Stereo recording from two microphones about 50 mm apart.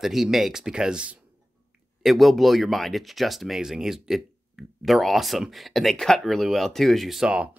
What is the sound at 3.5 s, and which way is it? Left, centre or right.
Speech, centre.